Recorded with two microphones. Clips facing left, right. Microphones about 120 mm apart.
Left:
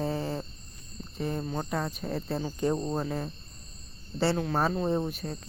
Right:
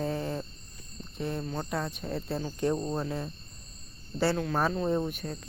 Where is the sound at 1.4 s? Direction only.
15° left (ahead or behind).